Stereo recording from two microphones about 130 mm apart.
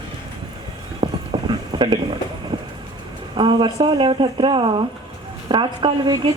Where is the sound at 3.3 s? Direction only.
40° right (ahead or behind).